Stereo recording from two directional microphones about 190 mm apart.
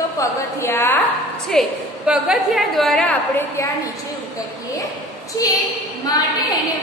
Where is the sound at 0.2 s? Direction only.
15° left (ahead or behind).